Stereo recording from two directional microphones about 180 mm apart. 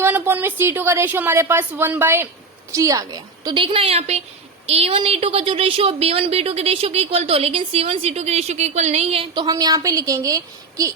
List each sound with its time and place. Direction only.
0.0 s a woman's voice: 10° right (ahead or behind)